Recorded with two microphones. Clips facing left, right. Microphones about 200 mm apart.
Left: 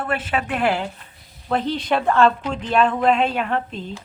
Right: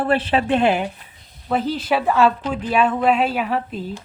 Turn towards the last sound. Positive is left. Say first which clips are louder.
# right 1 dB
turn(degrees=-5)  # may be behind; listen again after turning